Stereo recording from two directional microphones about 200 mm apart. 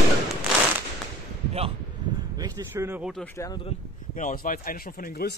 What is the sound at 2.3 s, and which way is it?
Speech, 15° right (ahead or behind).